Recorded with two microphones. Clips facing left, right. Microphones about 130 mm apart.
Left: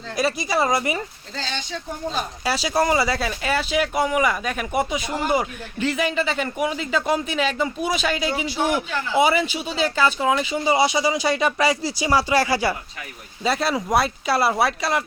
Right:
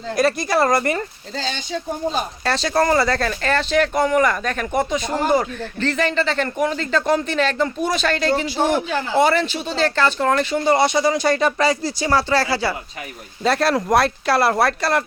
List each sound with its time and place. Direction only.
0.2 s speech: centre (ahead or behind)
1.4 s speech: 40° right (ahead or behind)
2.4 s speech: 10° left (ahead or behind)
8.5 s speech: 45° right (ahead or behind)
9.1 s speech: 5° left (ahead or behind)
13.4 s speech: centre (ahead or behind)